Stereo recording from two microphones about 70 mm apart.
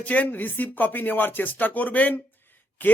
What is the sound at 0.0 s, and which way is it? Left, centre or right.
Speech, left.